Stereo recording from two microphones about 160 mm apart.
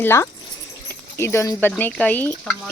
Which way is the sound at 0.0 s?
15° left (ahead or behind).